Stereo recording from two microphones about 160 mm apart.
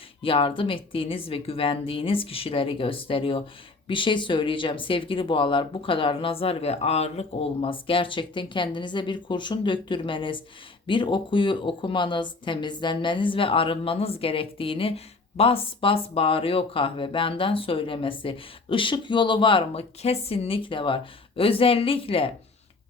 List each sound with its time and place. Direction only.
0.2 s speech: 35° left (ahead or behind)